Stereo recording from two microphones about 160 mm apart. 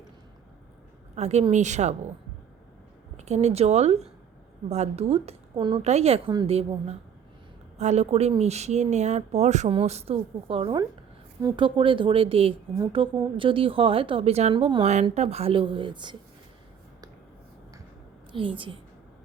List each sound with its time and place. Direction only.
1.1 s speech: 45° right (ahead or behind)
3.2 s speech: 45° right (ahead or behind)
5.8 s speech: 45° right (ahead or behind)
18.3 s speech: 30° right (ahead or behind)